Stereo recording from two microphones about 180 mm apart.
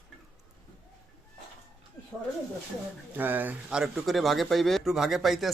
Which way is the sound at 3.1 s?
10° right (ahead or behind).